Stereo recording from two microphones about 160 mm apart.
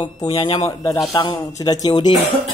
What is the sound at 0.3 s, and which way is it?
Speech, 25° left (ahead or behind).